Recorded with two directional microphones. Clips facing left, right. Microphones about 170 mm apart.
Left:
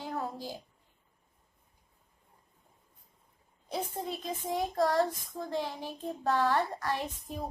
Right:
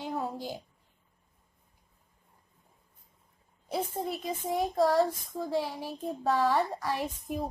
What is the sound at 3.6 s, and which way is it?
A child's voice, 10° right (ahead or behind).